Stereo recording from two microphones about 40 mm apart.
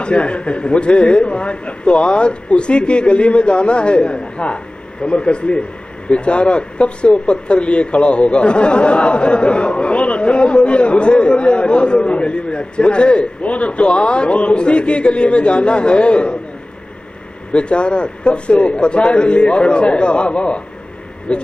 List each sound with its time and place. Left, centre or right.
0.0 s a man's voice: left
17.5 s a man's voice: left